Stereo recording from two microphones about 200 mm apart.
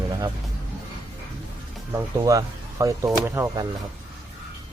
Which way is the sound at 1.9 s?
15° right (ahead or behind).